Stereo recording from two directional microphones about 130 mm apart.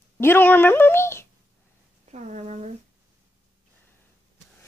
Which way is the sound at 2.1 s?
60° right (ahead or behind).